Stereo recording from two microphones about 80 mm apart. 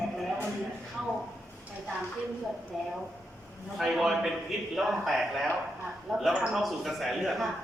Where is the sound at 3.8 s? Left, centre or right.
Centre.